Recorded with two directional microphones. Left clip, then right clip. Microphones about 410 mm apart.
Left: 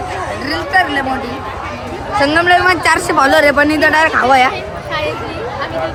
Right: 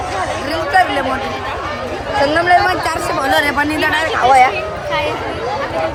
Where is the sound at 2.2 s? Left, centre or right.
Left.